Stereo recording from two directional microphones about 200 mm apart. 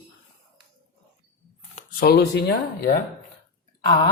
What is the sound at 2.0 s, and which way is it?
Speech, 50° left (ahead or behind).